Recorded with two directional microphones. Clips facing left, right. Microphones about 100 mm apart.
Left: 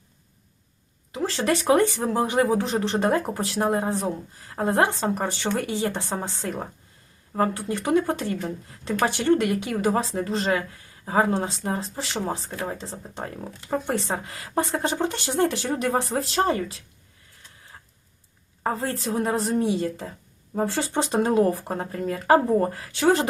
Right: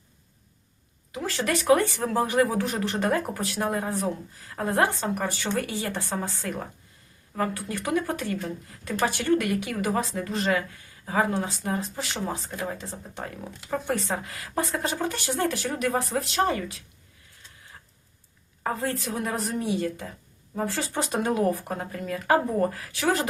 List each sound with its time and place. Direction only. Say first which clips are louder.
1.1 s speech: left 3 dB; 30° left (ahead or behind)
18.6 s speech: left 2 dB; 30° left (ahead or behind)